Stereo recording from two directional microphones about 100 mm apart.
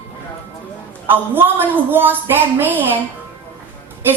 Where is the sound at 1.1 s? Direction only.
20° right (ahead or behind).